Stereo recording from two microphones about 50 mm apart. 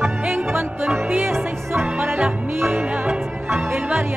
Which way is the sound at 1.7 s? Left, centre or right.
Right.